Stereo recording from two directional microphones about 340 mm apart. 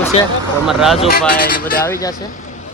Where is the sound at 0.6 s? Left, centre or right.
Centre.